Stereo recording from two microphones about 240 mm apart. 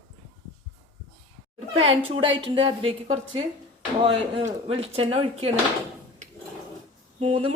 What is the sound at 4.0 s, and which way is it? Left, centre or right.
Speech, right.